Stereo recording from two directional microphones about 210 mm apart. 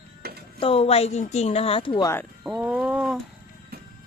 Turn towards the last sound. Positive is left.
turn(degrees=0)  # may be behind; listen again after turning